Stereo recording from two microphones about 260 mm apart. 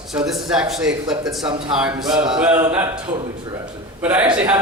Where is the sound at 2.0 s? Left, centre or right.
Centre.